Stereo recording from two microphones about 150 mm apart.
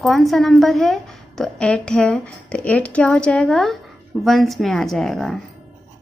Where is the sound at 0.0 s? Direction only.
Centre (ahead or behind).